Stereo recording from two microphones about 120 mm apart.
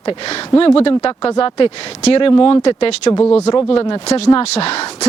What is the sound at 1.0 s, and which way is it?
Speech, 30° left (ahead or behind).